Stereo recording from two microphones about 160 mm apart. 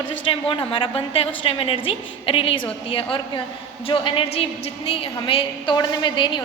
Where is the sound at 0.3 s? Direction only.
35° left (ahead or behind).